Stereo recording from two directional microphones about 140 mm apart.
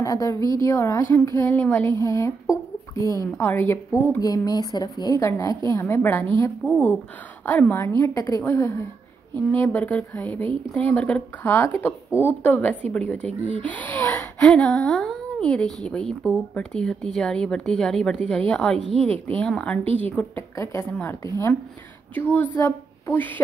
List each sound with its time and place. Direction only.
0.0 s a woman's voice: 25° left (ahead or behind)
7.4 s a woman's voice: 10° left (ahead or behind)
18.9 s a woman's voice: 45° right (ahead or behind)
19.2 s a woman's voice: 5° left (ahead or behind)